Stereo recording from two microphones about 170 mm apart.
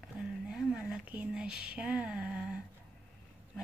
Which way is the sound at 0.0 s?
5° right (ahead or behind).